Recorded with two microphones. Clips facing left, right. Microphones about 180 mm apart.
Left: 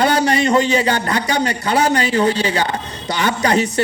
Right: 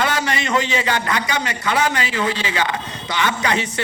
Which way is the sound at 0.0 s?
35° left (ahead or behind).